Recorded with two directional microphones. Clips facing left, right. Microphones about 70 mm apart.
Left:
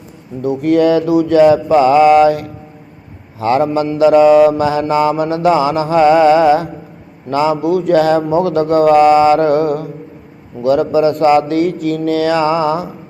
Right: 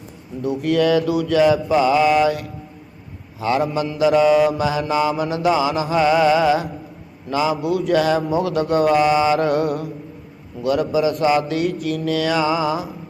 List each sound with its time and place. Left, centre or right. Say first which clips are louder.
0.4 s mantra: left 6 dB; left